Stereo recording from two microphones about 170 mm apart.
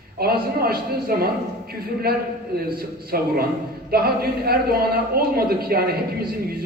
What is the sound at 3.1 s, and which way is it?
A man's voice, 60° right (ahead or behind).